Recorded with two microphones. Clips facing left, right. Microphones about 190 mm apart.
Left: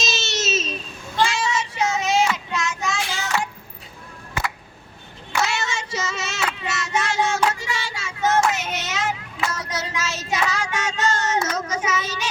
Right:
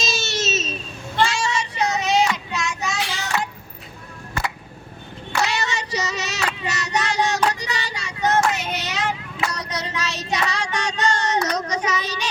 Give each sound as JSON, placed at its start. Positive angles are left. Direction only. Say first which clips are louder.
{"t": 0.3, "sound": "a sound", "louder": "left 1 dB", "side_deg": 0}
{"t": 1.1, "sound": "child singing", "louder": "even", "side_deg": 5}
{"t": 5.3, "sound": "child singing", "louder": "right 1 dB", "side_deg": 0}